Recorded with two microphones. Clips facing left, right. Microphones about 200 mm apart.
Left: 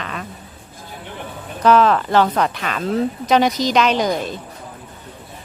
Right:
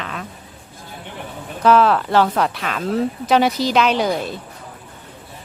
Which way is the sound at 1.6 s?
5° right (ahead or behind).